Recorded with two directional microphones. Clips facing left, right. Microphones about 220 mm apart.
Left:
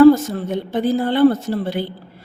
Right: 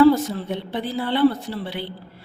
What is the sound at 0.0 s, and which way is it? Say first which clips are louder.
A woman's voice: left 5 dB; 45° left (ahead or behind).